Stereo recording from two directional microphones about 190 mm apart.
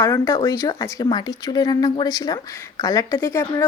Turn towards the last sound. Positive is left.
turn(degrees=15)  # may be behind; listen again after turning